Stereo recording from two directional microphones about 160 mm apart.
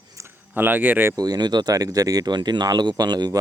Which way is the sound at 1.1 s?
25° right (ahead or behind).